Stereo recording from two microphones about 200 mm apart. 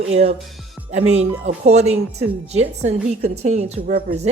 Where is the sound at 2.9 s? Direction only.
35° right (ahead or behind).